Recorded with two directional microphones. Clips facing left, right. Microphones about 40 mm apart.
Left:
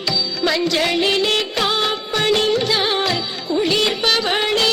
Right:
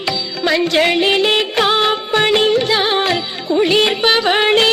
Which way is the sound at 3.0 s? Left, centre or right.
Right.